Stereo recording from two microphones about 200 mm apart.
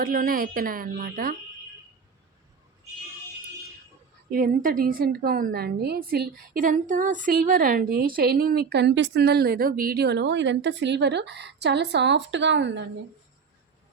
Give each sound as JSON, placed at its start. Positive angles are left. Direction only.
{"t": 0.0, "sound": "a woman's voice", "side_deg": -45}
{"t": 4.3, "sound": "a woman's voice", "side_deg": -45}